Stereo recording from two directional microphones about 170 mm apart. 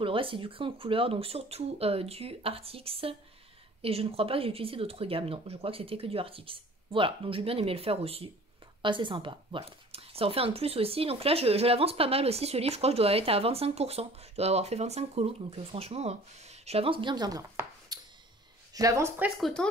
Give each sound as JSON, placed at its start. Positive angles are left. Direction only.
{"t": 0.0, "sound": "speech", "side_deg": -30}